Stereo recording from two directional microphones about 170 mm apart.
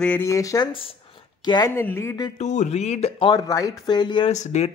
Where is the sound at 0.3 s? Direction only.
20° left (ahead or behind).